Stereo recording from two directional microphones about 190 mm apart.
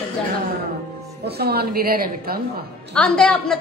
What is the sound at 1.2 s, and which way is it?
A woman's voice, 55° right (ahead or behind).